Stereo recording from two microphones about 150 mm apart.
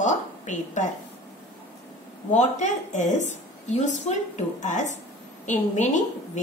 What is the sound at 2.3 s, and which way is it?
A woman's voice, 55° left (ahead or behind).